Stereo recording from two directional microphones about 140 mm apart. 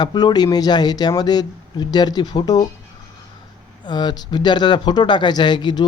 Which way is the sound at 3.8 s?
30° left (ahead or behind).